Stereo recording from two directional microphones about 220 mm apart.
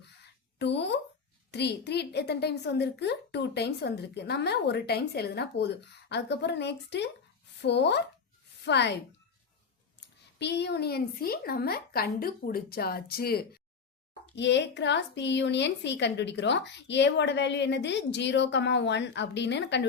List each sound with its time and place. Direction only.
0.6 s a woman's voice: 50° left (ahead or behind)
10.3 s a woman's voice: 50° left (ahead or behind)